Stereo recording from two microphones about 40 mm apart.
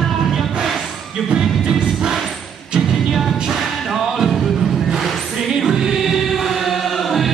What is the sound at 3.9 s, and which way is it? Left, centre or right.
Music, centre.